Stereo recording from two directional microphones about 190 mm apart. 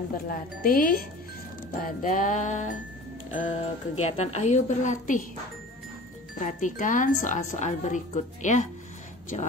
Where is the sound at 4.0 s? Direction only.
35° left (ahead or behind).